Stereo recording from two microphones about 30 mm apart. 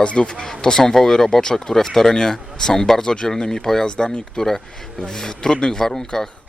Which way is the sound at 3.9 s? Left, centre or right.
Left.